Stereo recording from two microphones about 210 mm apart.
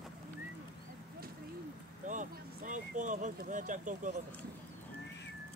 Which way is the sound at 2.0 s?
35° right (ahead or behind).